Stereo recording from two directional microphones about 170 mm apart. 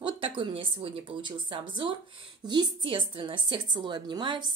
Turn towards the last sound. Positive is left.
turn(degrees=-25)  # may be behind; listen again after turning